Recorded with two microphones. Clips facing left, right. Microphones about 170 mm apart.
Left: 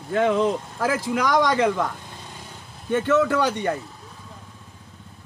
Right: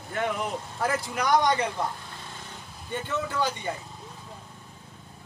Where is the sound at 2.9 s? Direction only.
85° left.